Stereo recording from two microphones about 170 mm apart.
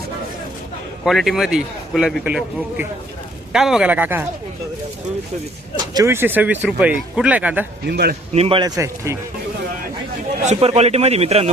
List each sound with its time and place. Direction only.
1.0 s a man's voice: centre (ahead or behind)
5.9 s speech: 20° right (ahead or behind)
7.9 s speech: 70° right (ahead or behind)
8.3 s speech: 35° right (ahead or behind); by 9.1 s 20° right (ahead or behind)
10.4 s a man's voice: 40° right (ahead or behind)